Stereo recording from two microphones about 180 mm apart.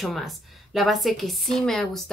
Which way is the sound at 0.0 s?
Centre (ahead or behind).